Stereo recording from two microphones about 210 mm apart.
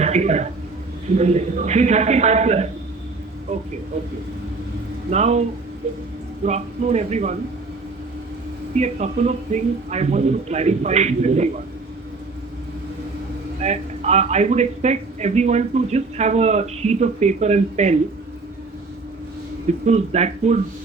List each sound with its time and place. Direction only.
0.0 s a man's voice: 30° right (ahead or behind)
5.1 s a man's voice: 30° right (ahead or behind)
6.4 s a man's voice: 30° right (ahead or behind)
8.7 s a man's voice: 30° right (ahead or behind)
13.6 s a man's voice: 30° right (ahead or behind)
19.8 s a man's voice: 30° right (ahead or behind)